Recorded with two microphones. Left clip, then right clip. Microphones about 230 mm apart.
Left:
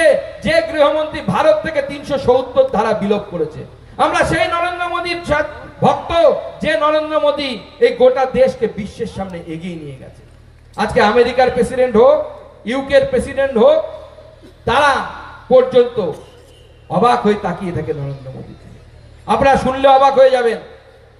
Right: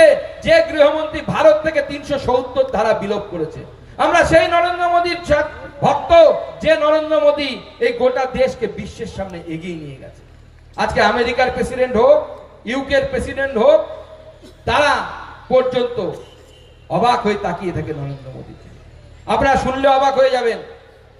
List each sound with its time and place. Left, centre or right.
0.0 s a man's voice: centre
10.8 s a man's voice: centre
19.3 s a man's voice: centre